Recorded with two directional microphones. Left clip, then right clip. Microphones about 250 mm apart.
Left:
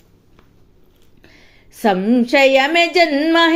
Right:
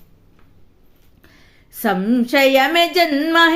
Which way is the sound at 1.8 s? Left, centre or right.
Centre.